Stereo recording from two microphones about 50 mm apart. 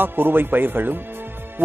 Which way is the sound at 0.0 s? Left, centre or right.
Right.